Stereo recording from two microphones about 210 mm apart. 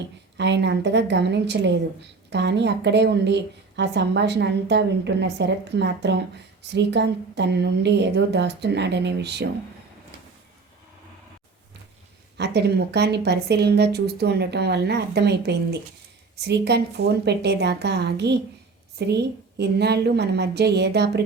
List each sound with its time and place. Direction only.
0.3 s a woman's voice: 55° right (ahead or behind)
12.4 s speech: 50° right (ahead or behind)